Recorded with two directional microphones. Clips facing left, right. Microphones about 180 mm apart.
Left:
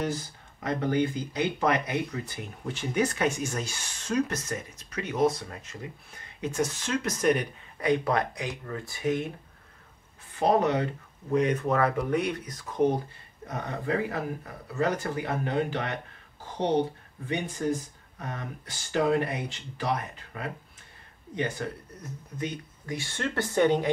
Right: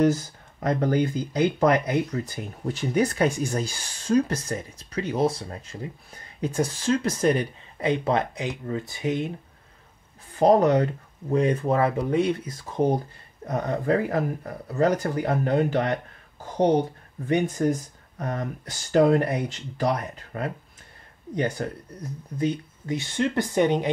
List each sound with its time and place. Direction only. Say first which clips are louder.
0.6 s speech: right 4 dB; 40° right (ahead or behind); by 9.3 s 25° right (ahead or behind)
10.4 s speech: right 6 dB; 40° right (ahead or behind)
11.3 s speech: right 3 dB; 30° right (ahead or behind)
13.5 s speech: right 7 dB; 45° right (ahead or behind)
17.6 s speech: right 5 dB; 45° right (ahead or behind)
21.6 s speech: right 3 dB; 40° right (ahead or behind)
22.4 s speech: right 9 dB; 25° right (ahead or behind)